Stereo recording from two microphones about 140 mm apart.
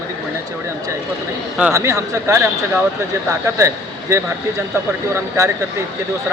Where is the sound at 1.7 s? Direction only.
20° right (ahead or behind).